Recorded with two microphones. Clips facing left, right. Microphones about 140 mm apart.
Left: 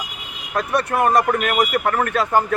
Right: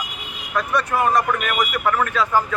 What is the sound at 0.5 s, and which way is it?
Speech, 65° left (ahead or behind).